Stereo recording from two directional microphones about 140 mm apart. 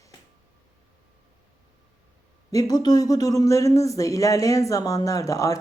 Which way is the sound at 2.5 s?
25° left (ahead or behind).